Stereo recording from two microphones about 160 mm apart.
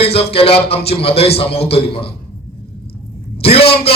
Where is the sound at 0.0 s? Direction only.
40° left (ahead or behind).